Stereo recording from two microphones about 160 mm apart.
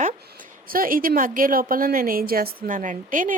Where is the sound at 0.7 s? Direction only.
60° right (ahead or behind).